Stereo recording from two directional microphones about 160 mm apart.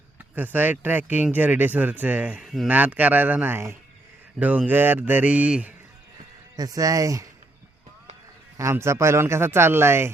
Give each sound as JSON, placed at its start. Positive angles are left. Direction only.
{"t": 0.3, "sound": "speech", "side_deg": -10}
{"t": 6.6, "sound": "speech", "side_deg": -25}
{"t": 8.5, "sound": "speech", "side_deg": -20}